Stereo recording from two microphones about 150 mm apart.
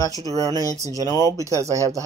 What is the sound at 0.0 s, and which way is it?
Speech, 25° left (ahead or behind).